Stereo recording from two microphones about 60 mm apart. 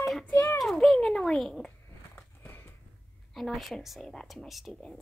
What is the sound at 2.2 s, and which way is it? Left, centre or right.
Biting, left.